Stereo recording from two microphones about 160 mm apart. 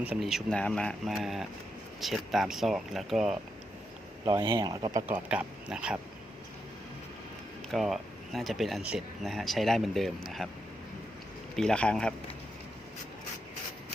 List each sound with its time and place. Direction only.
0.0 s speech: 5° right (ahead or behind)
4.3 s speech: 30° right (ahead or behind)
5.0 s speech: 10° right (ahead or behind)
7.7 s speech: centre (ahead or behind)
11.5 s speech: 5° left (ahead or behind)